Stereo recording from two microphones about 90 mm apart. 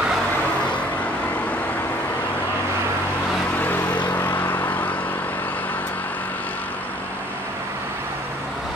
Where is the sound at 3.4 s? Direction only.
20° left (ahead or behind).